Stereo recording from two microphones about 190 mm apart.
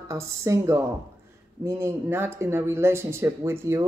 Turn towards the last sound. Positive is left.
turn(degrees=-15)  # may be behind; listen again after turning